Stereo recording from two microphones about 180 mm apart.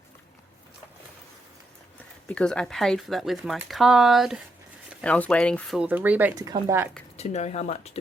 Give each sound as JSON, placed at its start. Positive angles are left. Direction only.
{"t": 2.0, "sound": "speech", "side_deg": 5}
{"t": 7.2, "sound": "speech", "side_deg": 40}